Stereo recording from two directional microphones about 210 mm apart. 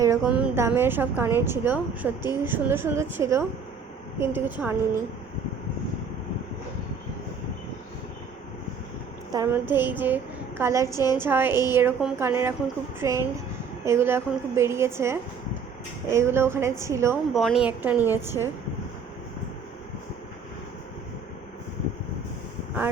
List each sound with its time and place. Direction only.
0.0 s a woman's voice: 10° right (ahead or behind)
9.3 s a woman's voice: 15° right (ahead or behind)
10.9 s a woman's voice: 20° left (ahead or behind)
11.2 s a woman's voice: 10° right (ahead or behind)
17.3 s a woman's voice: centre (ahead or behind)